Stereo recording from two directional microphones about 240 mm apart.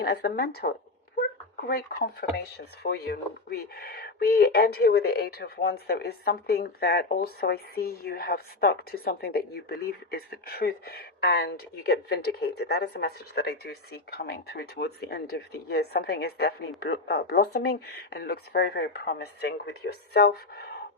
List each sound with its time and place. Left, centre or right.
0.0 s speech: left
2.2 s speech: left